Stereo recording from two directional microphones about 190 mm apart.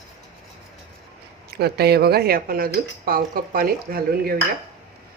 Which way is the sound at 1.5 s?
60° right (ahead or behind).